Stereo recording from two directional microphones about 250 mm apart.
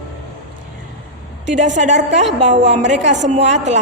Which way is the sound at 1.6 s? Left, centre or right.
Right.